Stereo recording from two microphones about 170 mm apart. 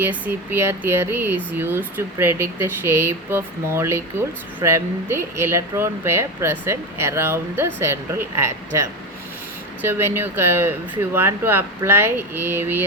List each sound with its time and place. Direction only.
0.0 s speech: 10° right (ahead or behind)